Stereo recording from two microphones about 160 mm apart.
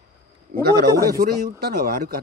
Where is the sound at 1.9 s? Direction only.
75° right (ahead or behind).